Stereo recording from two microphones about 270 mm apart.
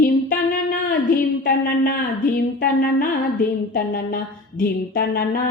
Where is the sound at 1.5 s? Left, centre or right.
Left.